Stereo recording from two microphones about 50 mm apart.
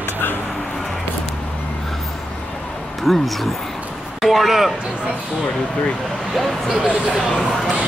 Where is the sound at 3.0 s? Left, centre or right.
Centre.